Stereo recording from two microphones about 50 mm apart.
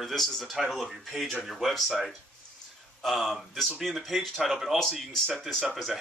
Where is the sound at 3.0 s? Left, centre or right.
Centre.